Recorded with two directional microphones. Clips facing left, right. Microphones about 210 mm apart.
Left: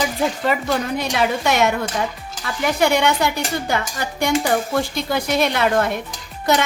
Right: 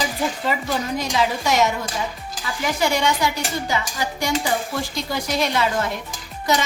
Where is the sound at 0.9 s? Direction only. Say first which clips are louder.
Left 2 dB; 60° left (ahead or behind).